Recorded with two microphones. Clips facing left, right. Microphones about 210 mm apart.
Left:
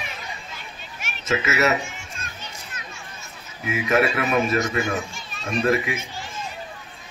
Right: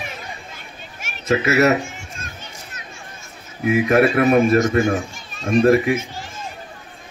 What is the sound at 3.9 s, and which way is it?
A child's voice, 45° right (ahead or behind).